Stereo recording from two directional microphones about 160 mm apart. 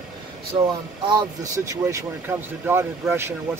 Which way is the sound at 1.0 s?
25° right (ahead or behind).